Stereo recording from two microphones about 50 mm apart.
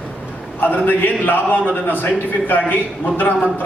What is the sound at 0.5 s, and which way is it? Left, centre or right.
A man's voice, left.